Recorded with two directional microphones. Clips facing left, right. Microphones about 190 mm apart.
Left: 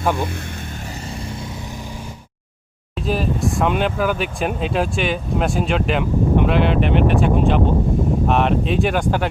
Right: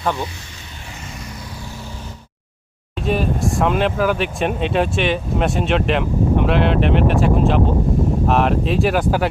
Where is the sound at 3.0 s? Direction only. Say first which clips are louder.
Right 1 dB; centre (ahead or behind).